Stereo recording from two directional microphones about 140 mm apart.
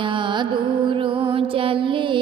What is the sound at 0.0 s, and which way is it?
Music, 35° right (ahead or behind).